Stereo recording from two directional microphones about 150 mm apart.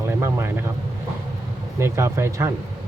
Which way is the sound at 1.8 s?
15° right (ahead or behind).